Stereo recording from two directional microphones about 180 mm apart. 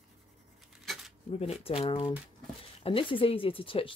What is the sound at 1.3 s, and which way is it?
Speech, 35° left (ahead or behind).